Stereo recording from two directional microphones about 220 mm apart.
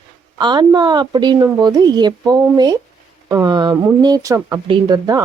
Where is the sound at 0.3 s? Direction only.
20° right (ahead or behind).